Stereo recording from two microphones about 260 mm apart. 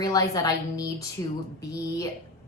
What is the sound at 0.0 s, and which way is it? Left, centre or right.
Speech, centre.